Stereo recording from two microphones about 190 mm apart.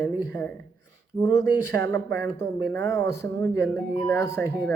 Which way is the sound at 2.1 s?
60° right (ahead or behind).